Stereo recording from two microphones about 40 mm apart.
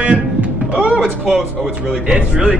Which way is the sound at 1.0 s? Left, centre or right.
Centre.